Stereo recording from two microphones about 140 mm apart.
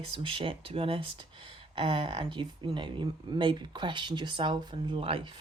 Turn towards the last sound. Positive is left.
turn(degrees=-40)  # may be behind; listen again after turning